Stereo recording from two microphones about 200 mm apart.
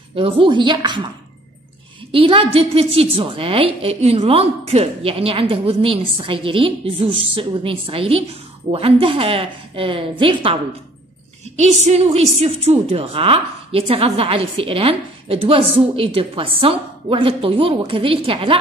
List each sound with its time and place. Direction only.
0.1 s a woman's voice: 25° right (ahead or behind)
2.1 s a woman's voice: 25° right (ahead or behind)